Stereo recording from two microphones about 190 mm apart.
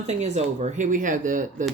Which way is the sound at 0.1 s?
35° right (ahead or behind).